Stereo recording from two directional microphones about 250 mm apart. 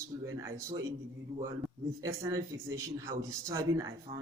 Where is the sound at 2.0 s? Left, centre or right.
Centre.